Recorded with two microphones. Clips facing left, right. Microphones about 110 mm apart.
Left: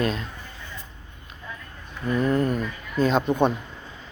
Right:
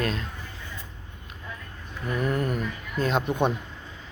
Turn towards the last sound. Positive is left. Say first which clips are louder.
# left 4 dB
turn(degrees=-5)  # may be behind; listen again after turning